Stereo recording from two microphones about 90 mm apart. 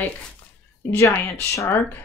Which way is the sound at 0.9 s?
30° left (ahead or behind).